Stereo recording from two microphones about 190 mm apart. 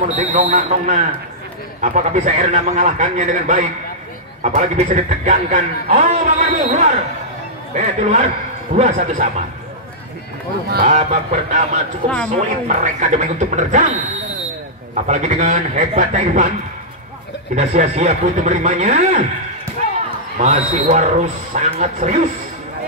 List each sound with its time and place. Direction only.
0.0 s a man's voice: 40° right (ahead or behind)
10.9 s a man's voice: 40° right (ahead or behind)
15.0 s a man's voice: 40° right (ahead or behind)
17.6 s a man's voice: 35° right (ahead or behind)
20.3 s a man's voice: 40° right (ahead or behind)